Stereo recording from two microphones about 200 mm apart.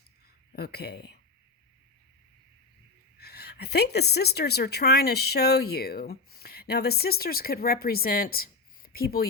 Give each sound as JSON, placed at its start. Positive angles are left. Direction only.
{"t": 0.5, "sound": "speech", "side_deg": 55}
{"t": 3.2, "sound": "a woman's voice", "side_deg": 55}